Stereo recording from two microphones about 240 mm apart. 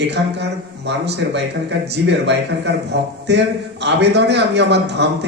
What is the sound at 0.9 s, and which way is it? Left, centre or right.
A man's voice, right.